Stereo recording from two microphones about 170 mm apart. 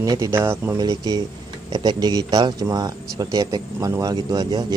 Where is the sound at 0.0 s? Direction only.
20° right (ahead or behind).